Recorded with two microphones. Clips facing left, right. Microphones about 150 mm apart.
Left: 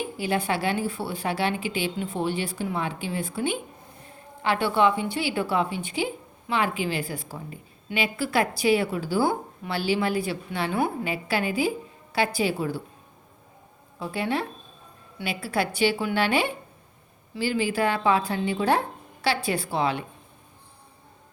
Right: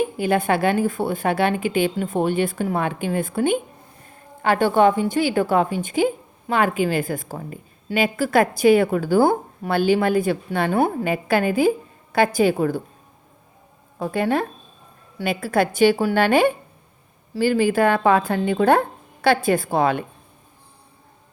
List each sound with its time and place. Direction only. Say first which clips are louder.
0.0 s a woman's voice: right 7 dB; 50° right (ahead or behind)
14.0 s a woman's voice: right 6 dB; 50° right (ahead or behind)